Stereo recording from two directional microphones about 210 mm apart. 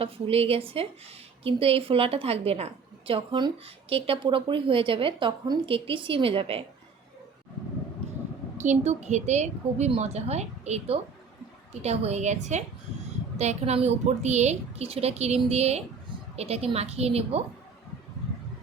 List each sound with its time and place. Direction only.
0.0 s a woman's voice: 30° right (ahead or behind)
8.5 s a woman's voice: 35° right (ahead or behind)